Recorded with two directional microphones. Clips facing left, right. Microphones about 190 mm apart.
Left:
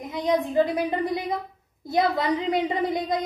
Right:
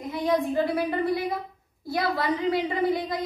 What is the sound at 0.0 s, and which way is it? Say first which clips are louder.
A woman's voice: left 1 dB; 20° left (ahead or behind).